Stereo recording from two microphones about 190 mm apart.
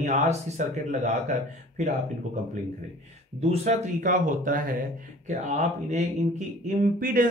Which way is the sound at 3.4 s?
40° right (ahead or behind).